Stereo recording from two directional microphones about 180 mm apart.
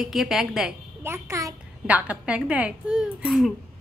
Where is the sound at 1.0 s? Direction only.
15° right (ahead or behind).